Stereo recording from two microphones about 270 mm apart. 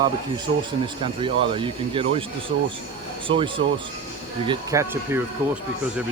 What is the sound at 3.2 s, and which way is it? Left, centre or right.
Speech, centre.